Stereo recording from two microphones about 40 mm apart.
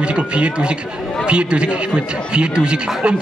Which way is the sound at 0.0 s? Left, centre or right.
Right.